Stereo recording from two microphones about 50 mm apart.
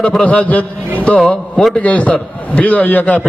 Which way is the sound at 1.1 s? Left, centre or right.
Centre.